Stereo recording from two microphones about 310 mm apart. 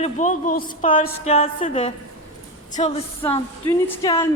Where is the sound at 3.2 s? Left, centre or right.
Centre.